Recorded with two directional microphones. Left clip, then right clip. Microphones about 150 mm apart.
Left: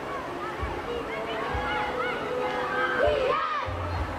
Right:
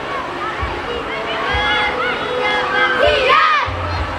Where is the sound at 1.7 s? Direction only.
25° right (ahead or behind).